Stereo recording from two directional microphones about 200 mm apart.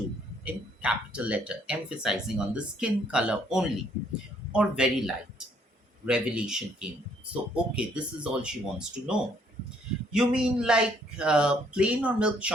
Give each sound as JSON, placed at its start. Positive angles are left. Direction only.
{"t": 0.4, "sound": "speech", "side_deg": -5}